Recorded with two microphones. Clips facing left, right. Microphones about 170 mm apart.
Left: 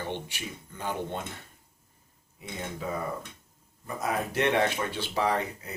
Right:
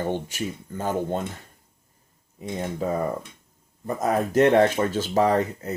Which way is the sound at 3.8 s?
40° right (ahead or behind).